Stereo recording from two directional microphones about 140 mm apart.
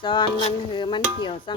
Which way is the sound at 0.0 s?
35° left (ahead or behind).